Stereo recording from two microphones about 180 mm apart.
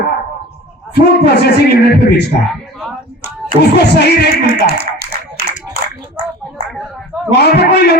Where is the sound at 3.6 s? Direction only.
65° left (ahead or behind).